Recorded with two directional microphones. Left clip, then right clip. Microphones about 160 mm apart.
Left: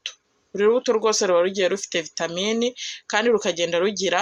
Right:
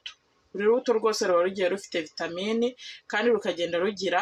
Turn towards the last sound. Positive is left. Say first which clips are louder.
# left 5 dB
turn(degrees=25)  # may be behind; listen again after turning